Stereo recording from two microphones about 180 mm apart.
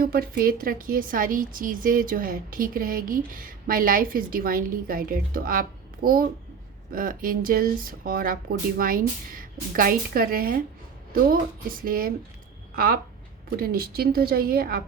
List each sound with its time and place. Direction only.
0.0 s a woman's voice: 55° right (ahead or behind)
11.8 s a woman's voice: 55° right (ahead or behind)